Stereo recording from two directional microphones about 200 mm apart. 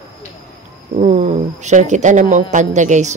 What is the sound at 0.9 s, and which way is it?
Speech, 35° right (ahead or behind).